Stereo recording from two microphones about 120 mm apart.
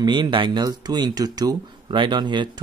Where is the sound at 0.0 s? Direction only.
40° right (ahead or behind).